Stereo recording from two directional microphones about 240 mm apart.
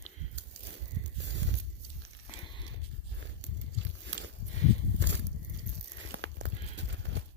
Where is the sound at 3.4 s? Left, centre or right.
Right.